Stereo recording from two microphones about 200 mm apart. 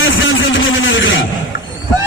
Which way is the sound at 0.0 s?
70° left (ahead or behind).